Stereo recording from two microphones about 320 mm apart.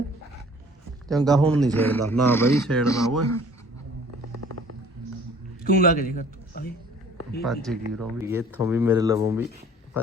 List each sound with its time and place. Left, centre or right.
1.0 s speech: centre
5.6 s a man's voice: left
7.4 s speech: centre